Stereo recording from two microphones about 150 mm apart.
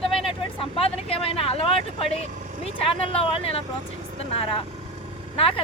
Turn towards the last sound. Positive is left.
turn(degrees=40)  # may be behind; listen again after turning